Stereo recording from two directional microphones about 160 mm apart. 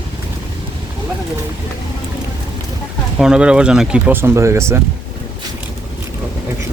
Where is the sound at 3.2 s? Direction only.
5° right (ahead or behind).